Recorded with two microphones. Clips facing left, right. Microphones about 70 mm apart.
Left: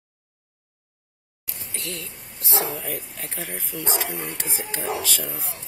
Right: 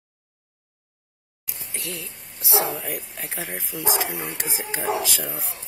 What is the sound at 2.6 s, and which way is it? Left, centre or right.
Speech, centre.